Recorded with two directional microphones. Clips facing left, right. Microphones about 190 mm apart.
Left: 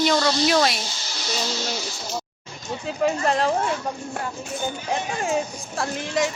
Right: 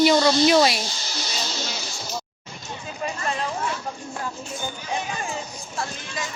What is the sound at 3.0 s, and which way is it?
Speech, 75° left (ahead or behind).